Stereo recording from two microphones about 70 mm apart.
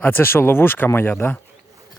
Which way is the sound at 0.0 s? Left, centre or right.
Left.